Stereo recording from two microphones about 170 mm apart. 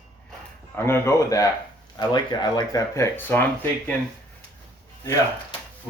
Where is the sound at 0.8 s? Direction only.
15° left (ahead or behind).